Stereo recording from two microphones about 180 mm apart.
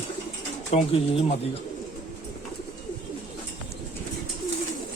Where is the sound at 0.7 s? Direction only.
40° left (ahead or behind).